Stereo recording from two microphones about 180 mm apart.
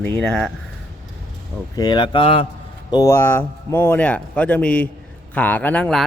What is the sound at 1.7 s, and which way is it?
Speech, 25° left (ahead or behind).